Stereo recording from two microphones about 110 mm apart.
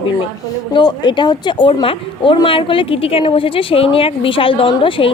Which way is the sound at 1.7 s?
55° left (ahead or behind).